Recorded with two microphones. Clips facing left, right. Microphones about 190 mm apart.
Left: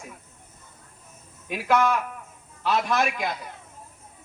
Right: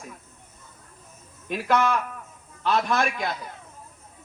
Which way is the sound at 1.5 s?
10° left (ahead or behind).